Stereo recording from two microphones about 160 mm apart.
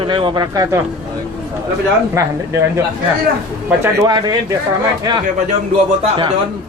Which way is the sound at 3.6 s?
15° right (ahead or behind).